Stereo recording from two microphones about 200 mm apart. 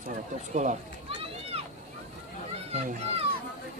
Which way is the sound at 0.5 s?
35° right (ahead or behind).